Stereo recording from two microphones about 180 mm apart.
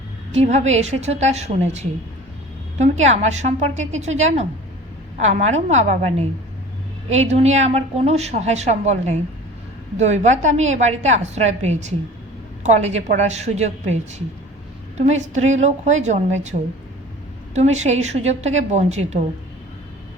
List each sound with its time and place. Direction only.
0.3 s a woman's voice: 35° right (ahead or behind)